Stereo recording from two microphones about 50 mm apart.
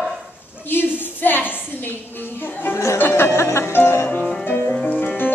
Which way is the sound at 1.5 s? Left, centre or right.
Left.